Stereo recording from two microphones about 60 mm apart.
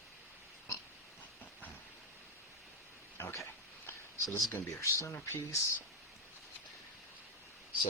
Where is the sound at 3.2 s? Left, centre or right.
Left.